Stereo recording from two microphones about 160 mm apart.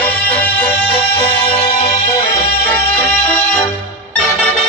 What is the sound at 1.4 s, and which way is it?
Music, 35° left (ahead or behind).